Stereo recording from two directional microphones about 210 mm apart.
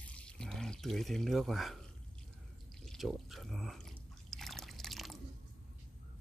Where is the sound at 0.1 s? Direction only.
5° left (ahead or behind).